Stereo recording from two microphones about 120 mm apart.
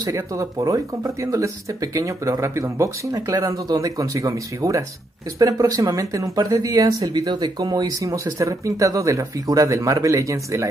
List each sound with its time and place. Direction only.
0.0 s speech: 25° right (ahead or behind)